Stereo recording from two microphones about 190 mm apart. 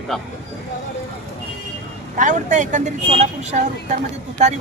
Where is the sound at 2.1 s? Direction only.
40° right (ahead or behind).